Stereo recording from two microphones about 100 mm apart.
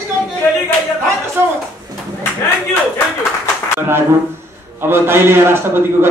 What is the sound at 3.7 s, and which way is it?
A man's voice, 25° right (ahead or behind).